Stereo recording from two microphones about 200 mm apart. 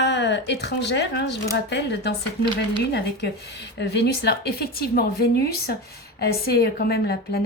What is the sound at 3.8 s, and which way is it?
Speech, 55° left (ahead or behind).